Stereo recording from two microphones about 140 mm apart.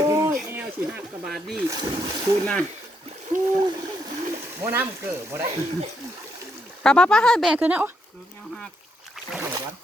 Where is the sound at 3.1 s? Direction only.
60° right (ahead or behind).